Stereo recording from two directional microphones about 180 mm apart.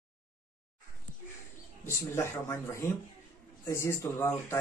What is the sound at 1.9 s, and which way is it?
Speech, 15° left (ahead or behind).